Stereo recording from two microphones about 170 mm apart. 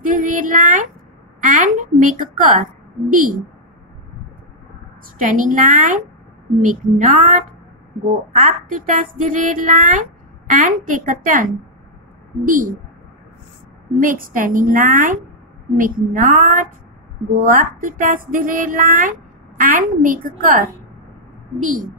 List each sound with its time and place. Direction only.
0.0 s speech: 50° right (ahead or behind)
5.2 s speech: 50° right (ahead or behind)
12.4 s speech: 55° right (ahead or behind)
13.9 s speech: 55° right (ahead or behind)